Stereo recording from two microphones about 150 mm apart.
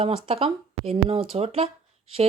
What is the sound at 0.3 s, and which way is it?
Speech, 40° right (ahead or behind).